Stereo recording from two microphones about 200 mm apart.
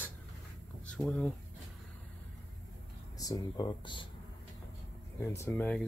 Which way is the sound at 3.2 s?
20° left (ahead or behind).